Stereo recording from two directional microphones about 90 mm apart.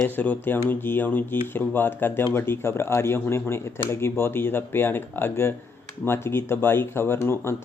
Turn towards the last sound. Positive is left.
turn(degrees=30)  # may be behind; listen again after turning